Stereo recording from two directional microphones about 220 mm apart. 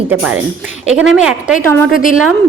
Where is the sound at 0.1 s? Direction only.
5° right (ahead or behind).